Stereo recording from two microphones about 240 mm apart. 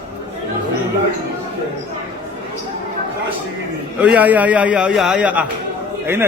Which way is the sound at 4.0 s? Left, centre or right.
Centre.